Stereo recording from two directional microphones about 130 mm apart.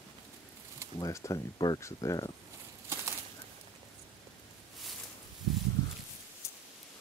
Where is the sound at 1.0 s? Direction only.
25° left (ahead or behind).